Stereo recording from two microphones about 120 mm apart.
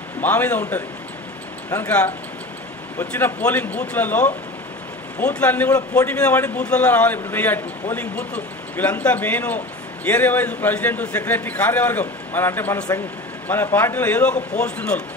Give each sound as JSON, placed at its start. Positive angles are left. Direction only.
{"t": 0.2, "sound": "a man's voice", "side_deg": 15}
{"t": 1.9, "sound": "a man's voice", "side_deg": 10}
{"t": 12.7, "sound": "speech", "side_deg": 30}
{"t": 13.5, "sound": "a man's voice", "side_deg": 15}